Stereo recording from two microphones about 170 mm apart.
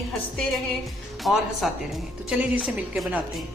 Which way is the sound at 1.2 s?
Centre (ahead or behind).